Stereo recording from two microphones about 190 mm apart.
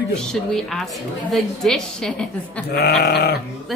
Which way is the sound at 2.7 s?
55° left (ahead or behind).